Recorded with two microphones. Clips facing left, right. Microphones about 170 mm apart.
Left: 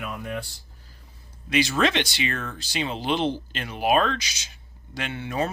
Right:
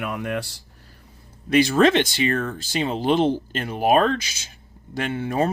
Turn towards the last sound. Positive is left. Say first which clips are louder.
# right 5 dB
turn(degrees=-45)  # may be behind; listen again after turning